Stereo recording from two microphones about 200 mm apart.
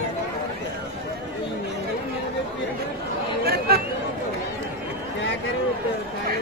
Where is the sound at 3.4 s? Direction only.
50° right (ahead or behind).